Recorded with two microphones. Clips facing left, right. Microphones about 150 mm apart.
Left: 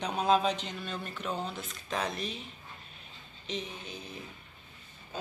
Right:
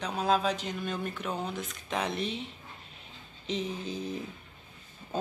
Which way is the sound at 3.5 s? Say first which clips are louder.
Right 5 dB; 30° right (ahead or behind).